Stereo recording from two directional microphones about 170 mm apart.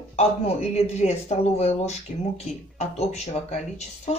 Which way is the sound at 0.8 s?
40° left (ahead or behind).